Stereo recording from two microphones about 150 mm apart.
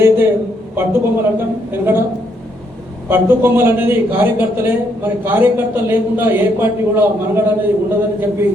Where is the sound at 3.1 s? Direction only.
15° right (ahead or behind).